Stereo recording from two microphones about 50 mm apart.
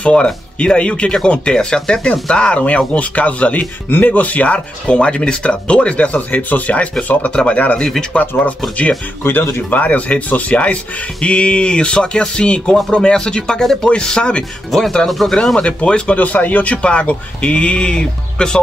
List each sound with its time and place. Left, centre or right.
0.0 s speech: left
9.2 s speech: left; by 15.6 s centre
15.6 s speech: left
16.2 s speech: left; by 18.6 s centre